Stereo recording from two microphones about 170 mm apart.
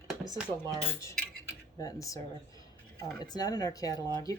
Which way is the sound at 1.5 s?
20° left (ahead or behind).